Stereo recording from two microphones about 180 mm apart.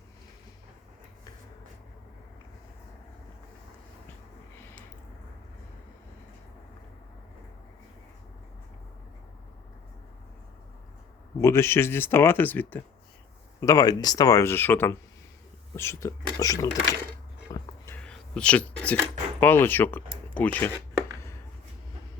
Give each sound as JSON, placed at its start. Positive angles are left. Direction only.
{"t": 11.3, "sound": "speech", "side_deg": 15}
{"t": 17.5, "sound": "a sound", "side_deg": 10}
{"t": 19.4, "sound": "speech", "side_deg": 10}